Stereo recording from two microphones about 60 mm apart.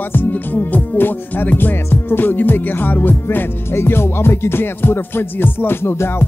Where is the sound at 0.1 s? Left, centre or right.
Left.